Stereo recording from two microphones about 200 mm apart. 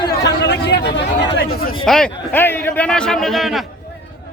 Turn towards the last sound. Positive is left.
turn(degrees=0)  # may be behind; listen again after turning